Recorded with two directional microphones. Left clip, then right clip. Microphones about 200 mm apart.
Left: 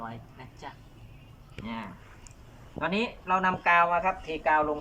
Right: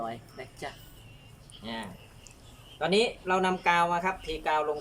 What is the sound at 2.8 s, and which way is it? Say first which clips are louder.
Speech: right 4 dB; 25° right (ahead or behind).